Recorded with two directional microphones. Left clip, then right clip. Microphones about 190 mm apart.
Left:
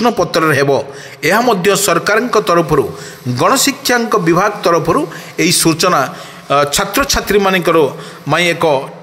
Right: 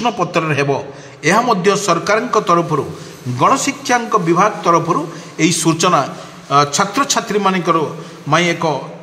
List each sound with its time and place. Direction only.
0.0 s a man's voice: 25° left (ahead or behind)